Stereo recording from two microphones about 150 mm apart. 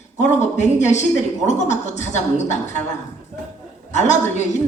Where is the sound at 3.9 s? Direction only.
50° left (ahead or behind).